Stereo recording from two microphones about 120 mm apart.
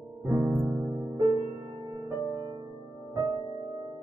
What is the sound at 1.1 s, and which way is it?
Music, 30° right (ahead or behind).